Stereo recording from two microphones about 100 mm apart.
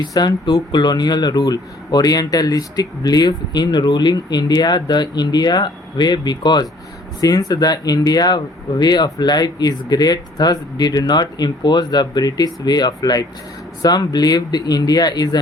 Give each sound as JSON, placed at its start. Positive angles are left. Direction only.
{"t": 0.1, "sound": "speech", "side_deg": 40}